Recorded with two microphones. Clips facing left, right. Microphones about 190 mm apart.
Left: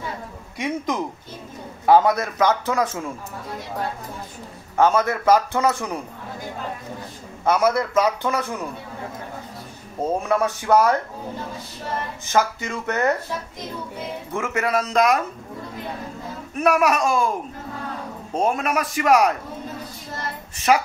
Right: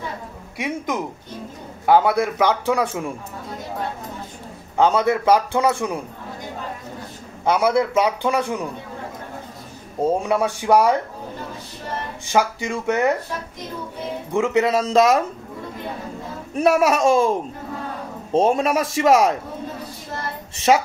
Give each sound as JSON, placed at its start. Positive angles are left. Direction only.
{"t": 0.6, "sound": "speech", "side_deg": -5}
{"t": 4.7, "sound": "speech", "side_deg": -15}
{"t": 7.5, "sound": "speech", "side_deg": -15}
{"t": 10.2, "sound": "speech", "side_deg": -15}
{"t": 12.3, "sound": "speech", "side_deg": -15}
{"t": 14.3, "sound": "a man's voice", "side_deg": -20}
{"t": 16.5, "sound": "a man's voice", "side_deg": -30}